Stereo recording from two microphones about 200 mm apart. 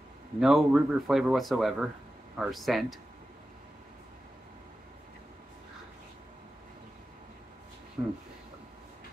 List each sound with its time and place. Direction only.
0.4 s speech: centre (ahead or behind)
8.0 s speech: 15° right (ahead or behind)